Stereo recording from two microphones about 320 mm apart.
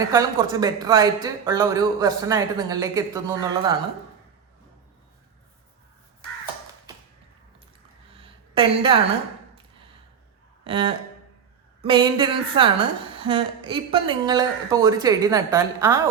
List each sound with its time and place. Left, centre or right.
0.1 s speech: centre
8.2 s a sound: centre
10.6 s speech: centre